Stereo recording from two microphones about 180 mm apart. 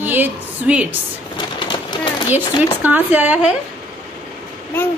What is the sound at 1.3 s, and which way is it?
Pigeon, 25° left (ahead or behind).